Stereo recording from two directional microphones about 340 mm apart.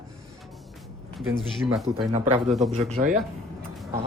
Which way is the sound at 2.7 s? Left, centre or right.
Right.